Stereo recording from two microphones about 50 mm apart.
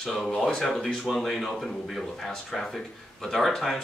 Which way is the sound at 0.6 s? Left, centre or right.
Centre.